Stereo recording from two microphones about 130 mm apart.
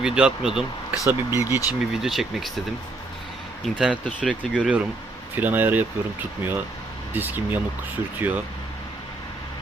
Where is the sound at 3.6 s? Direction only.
5° right (ahead or behind).